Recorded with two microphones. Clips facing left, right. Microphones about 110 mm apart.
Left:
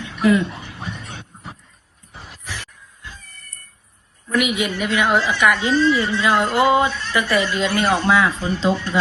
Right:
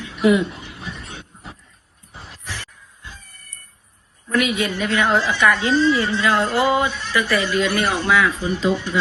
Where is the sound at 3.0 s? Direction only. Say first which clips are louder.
Left 1 dB; 15° right (ahead or behind).